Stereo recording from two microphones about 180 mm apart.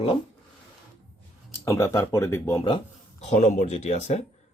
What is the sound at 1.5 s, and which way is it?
Speech, 15° left (ahead or behind).